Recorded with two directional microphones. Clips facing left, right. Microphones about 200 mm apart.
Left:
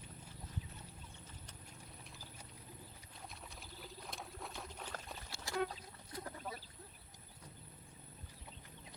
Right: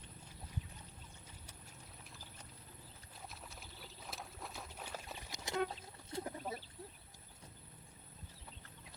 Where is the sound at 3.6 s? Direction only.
Centre (ahead or behind); by 6.6 s 25° right (ahead or behind).